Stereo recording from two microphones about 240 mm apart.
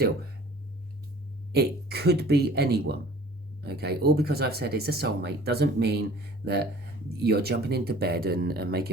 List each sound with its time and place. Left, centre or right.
1.5 s speech: right